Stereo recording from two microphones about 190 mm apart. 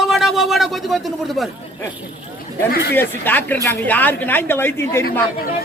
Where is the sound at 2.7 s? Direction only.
55° left (ahead or behind).